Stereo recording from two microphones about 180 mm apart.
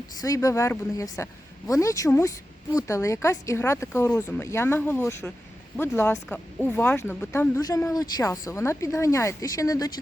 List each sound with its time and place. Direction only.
0.2 s speech: 20° left (ahead or behind)